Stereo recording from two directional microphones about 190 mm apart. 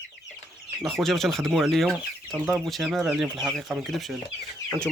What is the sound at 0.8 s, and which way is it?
Speech, centre (ahead or behind).